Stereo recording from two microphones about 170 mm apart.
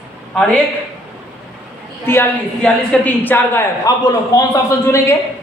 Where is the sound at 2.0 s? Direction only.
10° left (ahead or behind).